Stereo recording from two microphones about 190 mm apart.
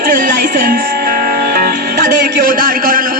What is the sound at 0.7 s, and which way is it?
Music, 55° right (ahead or behind).